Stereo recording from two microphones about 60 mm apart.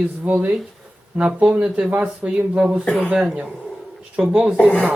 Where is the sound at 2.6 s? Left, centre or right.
Centre.